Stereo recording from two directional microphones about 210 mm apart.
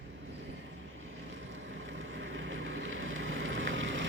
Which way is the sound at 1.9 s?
65° right (ahead or behind).